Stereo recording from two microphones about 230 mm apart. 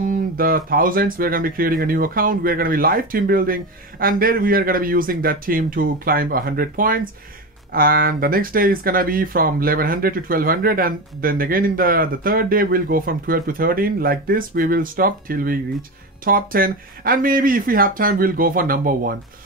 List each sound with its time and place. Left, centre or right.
0.0 s speech: right